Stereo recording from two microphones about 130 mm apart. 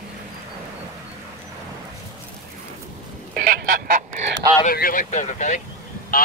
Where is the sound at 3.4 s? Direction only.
90° right.